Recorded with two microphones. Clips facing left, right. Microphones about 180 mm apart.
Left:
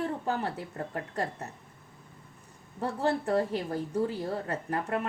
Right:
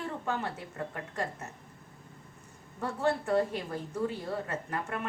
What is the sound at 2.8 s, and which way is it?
A woman's voice, 35° left (ahead or behind).